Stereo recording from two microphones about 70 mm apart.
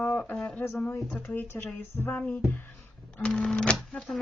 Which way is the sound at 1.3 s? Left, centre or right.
Left.